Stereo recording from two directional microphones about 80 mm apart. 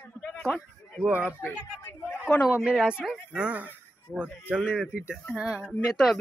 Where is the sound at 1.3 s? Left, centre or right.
Left.